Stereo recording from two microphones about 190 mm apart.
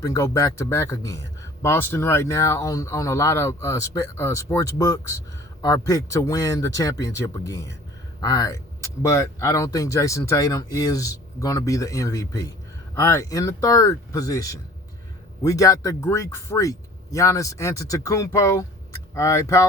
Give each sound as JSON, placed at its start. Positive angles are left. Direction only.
{"t": 0.0, "sound": "speech", "side_deg": 15}